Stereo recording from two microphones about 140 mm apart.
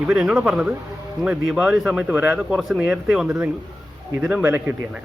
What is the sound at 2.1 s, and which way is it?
Speech, 15° right (ahead or behind).